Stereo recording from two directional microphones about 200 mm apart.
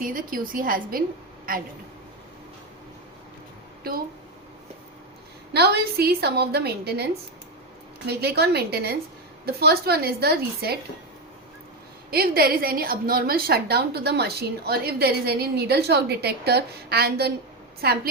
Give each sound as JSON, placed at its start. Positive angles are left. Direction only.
{"t": 0.0, "sound": "a woman's voice", "side_deg": -45}
{"t": 3.9, "sound": "a woman's voice", "side_deg": -50}
{"t": 5.5, "sound": "a woman's voice", "side_deg": -55}
{"t": 12.1, "sound": "a woman's voice", "side_deg": -50}